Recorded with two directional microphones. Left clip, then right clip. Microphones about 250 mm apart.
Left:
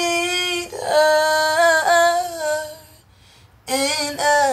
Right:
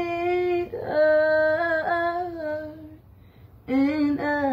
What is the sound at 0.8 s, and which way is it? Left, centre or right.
Yodeling, left.